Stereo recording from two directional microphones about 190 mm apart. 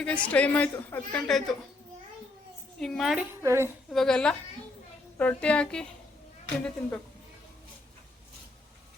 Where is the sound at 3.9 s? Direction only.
5° left (ahead or behind).